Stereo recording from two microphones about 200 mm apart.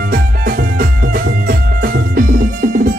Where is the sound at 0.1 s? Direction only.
45° right (ahead or behind).